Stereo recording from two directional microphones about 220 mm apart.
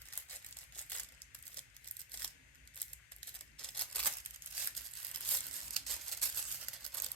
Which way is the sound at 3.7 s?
5° left (ahead or behind).